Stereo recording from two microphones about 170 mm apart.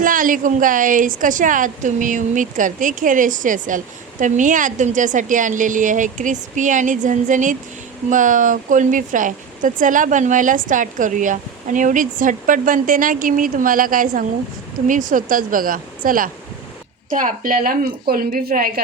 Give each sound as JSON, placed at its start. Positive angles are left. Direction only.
{"t": 0.0, "sound": "a woman's voice", "side_deg": -55}